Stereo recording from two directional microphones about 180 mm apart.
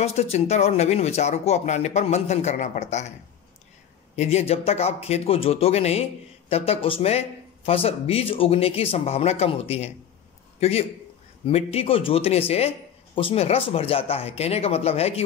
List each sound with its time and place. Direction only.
0.0 s speech: 35° left (ahead or behind)
4.2 s a man's voice: 35° left (ahead or behind)